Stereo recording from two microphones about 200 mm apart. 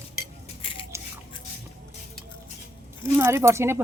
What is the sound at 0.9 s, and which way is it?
Scissors, 15° right (ahead or behind).